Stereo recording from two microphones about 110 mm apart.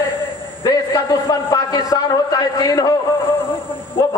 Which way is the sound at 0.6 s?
35° left (ahead or behind).